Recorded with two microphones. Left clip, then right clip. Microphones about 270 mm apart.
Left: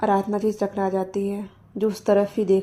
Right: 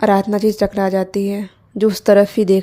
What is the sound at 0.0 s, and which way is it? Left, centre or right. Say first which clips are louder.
A woman's voice: right 7 dB; right.